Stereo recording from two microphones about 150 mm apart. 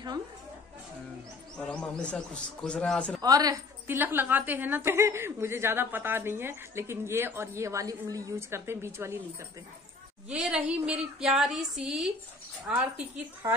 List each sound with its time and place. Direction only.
1.6 s a man's voice: 10° left (ahead or behind)
3.2 s a woman's voice: 25° right (ahead or behind)
3.8 s a woman's voice: 15° right (ahead or behind)
10.3 s a woman's voice: 5° right (ahead or behind)